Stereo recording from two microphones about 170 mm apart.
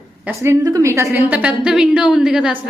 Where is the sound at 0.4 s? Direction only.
20° right (ahead or behind).